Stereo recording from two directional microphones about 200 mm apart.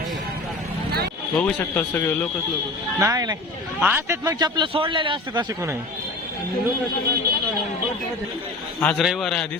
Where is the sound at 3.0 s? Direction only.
20° right (ahead or behind).